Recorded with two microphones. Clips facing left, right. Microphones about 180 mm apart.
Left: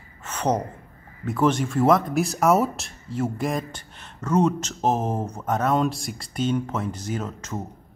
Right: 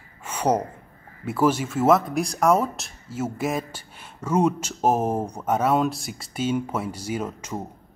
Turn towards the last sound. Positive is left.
turn(degrees=-10)  # may be behind; listen again after turning